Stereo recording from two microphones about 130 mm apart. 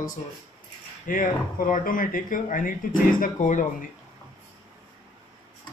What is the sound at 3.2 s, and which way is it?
Speech, 75° left (ahead or behind).